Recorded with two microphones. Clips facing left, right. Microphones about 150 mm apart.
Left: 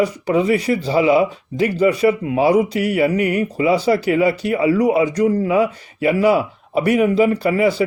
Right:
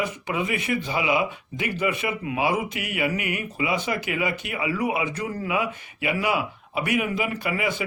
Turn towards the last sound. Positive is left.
turn(degrees=35)  # may be behind; listen again after turning